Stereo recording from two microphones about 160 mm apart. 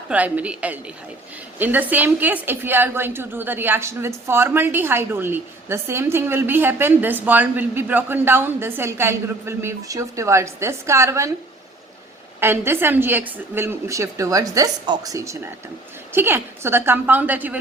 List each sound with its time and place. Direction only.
0.1 s a woman's voice: 10° right (ahead or behind)
12.4 s a woman's voice: 15° right (ahead or behind)